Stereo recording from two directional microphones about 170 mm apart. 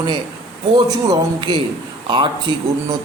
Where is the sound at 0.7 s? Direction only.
25° right (ahead or behind).